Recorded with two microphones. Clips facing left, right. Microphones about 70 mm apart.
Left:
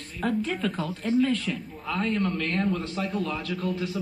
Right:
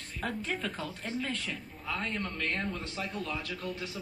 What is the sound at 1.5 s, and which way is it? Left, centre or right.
A man's voice, left.